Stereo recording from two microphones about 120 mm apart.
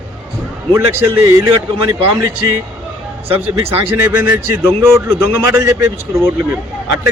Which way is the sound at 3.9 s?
20° right (ahead or behind).